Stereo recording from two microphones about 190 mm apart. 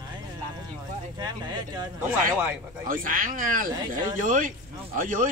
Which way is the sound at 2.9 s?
45° right (ahead or behind).